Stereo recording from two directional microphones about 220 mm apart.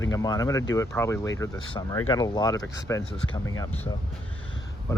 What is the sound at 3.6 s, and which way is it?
Speech, 10° left (ahead or behind).